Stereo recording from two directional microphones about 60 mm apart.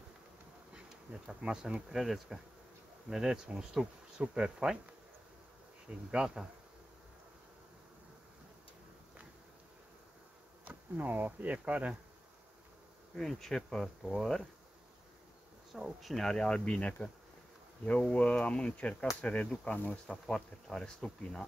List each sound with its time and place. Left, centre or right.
0.7 s bee: centre
3.1 s speech: centre
6.1 s speech: centre
10.6 s speech: right
13.1 s speech: centre
15.7 s speech: centre
18.1 s speech: centre
20.2 s speech: centre